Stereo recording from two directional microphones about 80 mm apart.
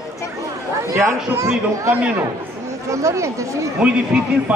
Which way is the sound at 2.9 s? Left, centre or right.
Right.